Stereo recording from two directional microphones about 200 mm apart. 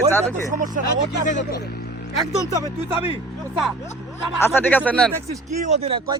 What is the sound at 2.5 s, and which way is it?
Speech, 15° right (ahead or behind).